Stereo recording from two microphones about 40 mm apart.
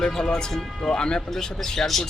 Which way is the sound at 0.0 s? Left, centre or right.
Centre.